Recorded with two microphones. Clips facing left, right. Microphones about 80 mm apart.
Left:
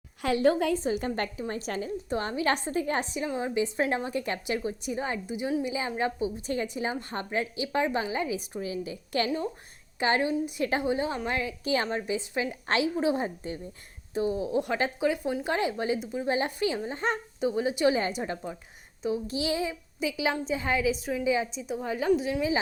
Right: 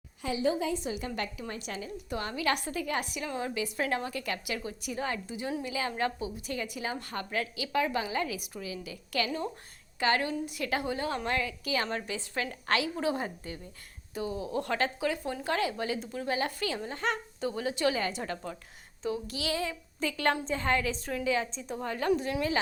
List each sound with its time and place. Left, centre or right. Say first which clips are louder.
0.2 s a woman's voice: left 6 dB; left
0.8 s a woman's voice: left 6 dB; left; by 22.5 s centre